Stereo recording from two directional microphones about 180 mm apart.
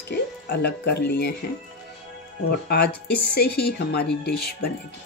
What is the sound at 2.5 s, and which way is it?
A woman's voice, 60° left (ahead or behind).